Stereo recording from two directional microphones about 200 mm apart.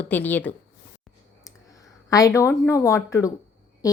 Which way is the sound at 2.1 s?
15° left (ahead or behind).